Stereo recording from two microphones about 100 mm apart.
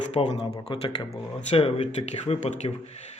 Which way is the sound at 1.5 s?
85° left.